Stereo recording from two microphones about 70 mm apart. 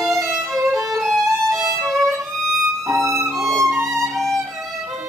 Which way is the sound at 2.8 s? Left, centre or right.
Right.